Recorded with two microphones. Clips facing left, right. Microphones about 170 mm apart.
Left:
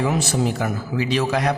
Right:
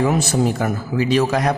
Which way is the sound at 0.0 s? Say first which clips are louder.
Right 3 dB; 45° right (ahead or behind).